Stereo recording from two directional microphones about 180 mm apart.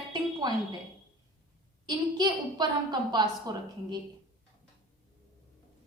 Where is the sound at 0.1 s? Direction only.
25° right (ahead or behind).